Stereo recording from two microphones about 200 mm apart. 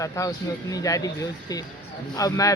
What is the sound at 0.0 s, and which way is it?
Speech, 15° left (ahead or behind).